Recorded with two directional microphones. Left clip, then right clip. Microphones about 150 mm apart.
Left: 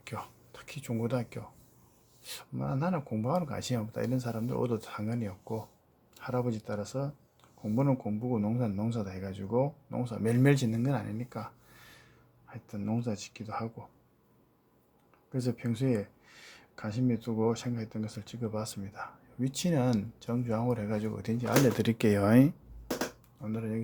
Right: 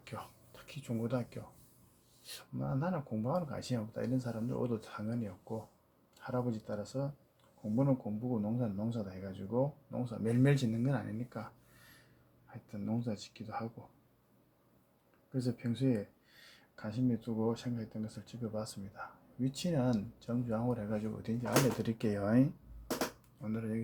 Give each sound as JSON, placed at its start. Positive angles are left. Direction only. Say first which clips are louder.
{"t": 0.0, "sound": "speech", "louder": "left 5 dB", "side_deg": 35}
{"t": 12.5, "sound": "speech", "louder": "left 4 dB", "side_deg": 30}
{"t": 15.3, "sound": "speech", "louder": "left 4 dB", "side_deg": 35}
{"t": 21.8, "sound": "speech", "louder": "left 8 dB", "side_deg": 50}
{"t": 23.4, "sound": "speech", "louder": "left 3 dB", "side_deg": 20}